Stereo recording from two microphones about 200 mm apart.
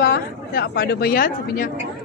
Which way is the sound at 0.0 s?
50° left (ahead or behind).